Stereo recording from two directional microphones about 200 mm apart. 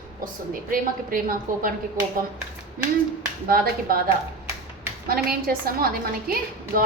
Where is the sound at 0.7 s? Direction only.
45° right (ahead or behind).